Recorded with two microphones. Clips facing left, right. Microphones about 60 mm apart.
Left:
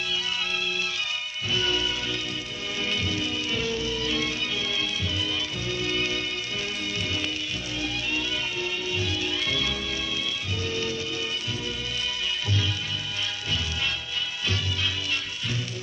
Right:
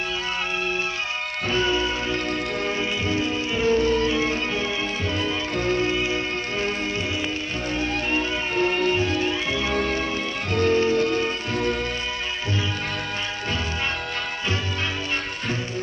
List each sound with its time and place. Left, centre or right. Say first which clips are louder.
1.5 s music: right 4 dB; right
5.9 s music: right 4 dB; right
7.8 s music: right 5 dB; right
10.5 s music: right 13 dB; right